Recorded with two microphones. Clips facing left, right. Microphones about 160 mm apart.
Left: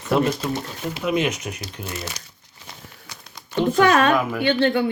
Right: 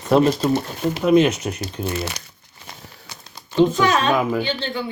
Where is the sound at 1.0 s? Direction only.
30° right (ahead or behind).